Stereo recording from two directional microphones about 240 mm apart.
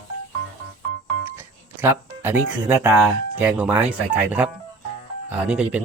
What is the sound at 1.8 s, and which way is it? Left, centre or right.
Speech, centre.